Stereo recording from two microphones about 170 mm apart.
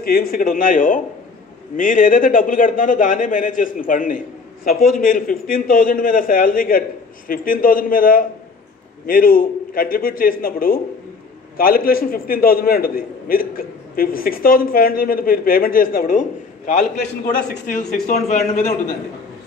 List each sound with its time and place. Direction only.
0.0 s a man's voice: 60° left (ahead or behind)
17.1 s a man's voice: 65° left (ahead or behind)